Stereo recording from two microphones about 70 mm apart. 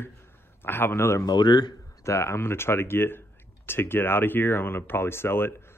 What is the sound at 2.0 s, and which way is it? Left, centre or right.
Speech, left.